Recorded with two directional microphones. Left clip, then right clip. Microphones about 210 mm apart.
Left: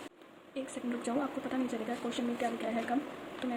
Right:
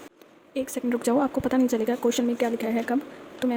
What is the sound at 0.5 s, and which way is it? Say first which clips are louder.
Speech: right 11 dB; 55° right (ahead or behind).